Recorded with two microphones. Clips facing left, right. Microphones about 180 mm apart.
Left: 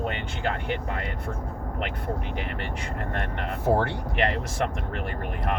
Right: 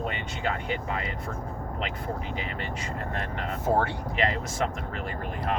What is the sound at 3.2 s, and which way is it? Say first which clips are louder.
Speech: left 1 dB; 65° left (ahead or behind).